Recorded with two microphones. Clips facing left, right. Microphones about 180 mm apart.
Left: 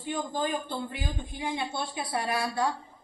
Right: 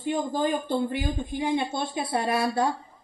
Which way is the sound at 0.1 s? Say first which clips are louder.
Right 4 dB; 25° right (ahead or behind).